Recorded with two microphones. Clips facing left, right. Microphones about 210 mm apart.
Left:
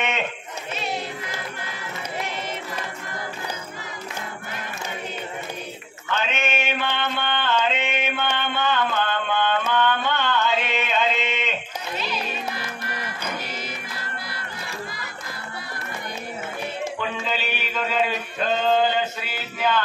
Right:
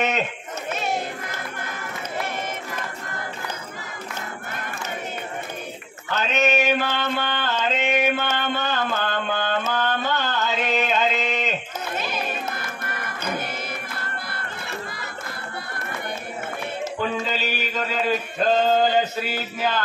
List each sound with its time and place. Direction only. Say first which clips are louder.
0.7 s music: right 2 dB; 50° right (ahead or behind)
2.1 s run: right 2 dB; 15° left (ahead or behind)
6.0 s mantra: right 4 dB; 40° right (ahead or behind)
9.7 s a sound: left 2 dB; 40° right (ahead or behind)
17.2 s music: right 2 dB; 40° right (ahead or behind)
18.7 s mantra: right 1 dB; 40° right (ahead or behind)